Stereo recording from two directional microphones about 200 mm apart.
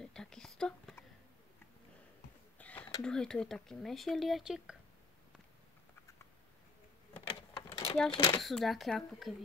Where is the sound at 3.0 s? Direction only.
5° left (ahead or behind).